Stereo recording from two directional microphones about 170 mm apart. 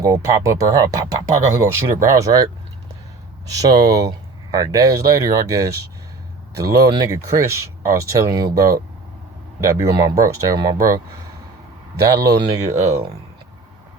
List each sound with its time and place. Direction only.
0.0 s speech: 20° right (ahead or behind)
11.9 s speech: 20° right (ahead or behind)